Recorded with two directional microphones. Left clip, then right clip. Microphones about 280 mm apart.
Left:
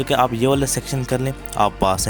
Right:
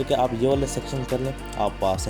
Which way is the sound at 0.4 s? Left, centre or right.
Left.